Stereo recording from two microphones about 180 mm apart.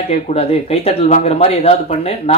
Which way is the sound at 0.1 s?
35° left (ahead or behind).